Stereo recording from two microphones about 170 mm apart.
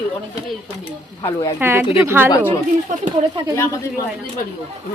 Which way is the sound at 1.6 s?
15° right (ahead or behind).